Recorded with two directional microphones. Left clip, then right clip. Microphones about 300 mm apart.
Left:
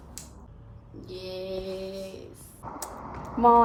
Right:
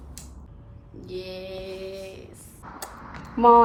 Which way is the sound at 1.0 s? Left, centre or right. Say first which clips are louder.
Right 1 dB; centre.